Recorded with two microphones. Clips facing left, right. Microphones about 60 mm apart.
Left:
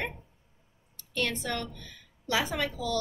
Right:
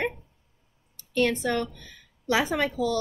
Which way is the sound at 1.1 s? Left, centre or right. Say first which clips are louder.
Right 7 dB; right.